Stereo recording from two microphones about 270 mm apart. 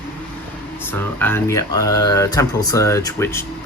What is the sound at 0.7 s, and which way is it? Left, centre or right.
Speech, centre.